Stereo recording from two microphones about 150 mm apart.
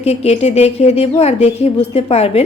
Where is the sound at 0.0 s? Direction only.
45° left (ahead or behind).